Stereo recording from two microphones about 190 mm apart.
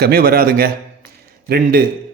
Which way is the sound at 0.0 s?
55° right (ahead or behind).